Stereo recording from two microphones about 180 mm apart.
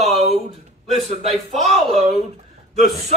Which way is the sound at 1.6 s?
35° right (ahead or behind).